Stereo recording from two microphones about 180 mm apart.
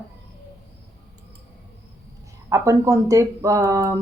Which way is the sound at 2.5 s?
15° right (ahead or behind).